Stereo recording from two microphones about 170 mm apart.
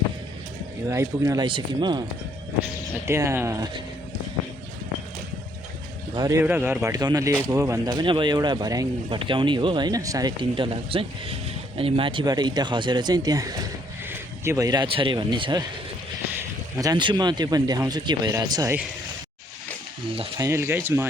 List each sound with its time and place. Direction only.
0.9 s speech: 15° right (ahead or behind)
3.1 s speech: 15° right (ahead or behind)
6.1 s speech: 20° right (ahead or behind)
20.1 s speech: 20° right (ahead or behind)